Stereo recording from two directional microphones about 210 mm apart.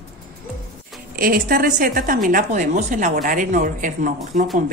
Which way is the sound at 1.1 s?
45° right (ahead or behind).